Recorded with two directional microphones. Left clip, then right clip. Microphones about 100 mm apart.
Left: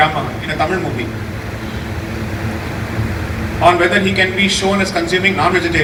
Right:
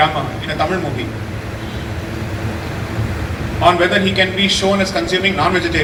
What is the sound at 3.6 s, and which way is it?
A man's voice, 25° right (ahead or behind).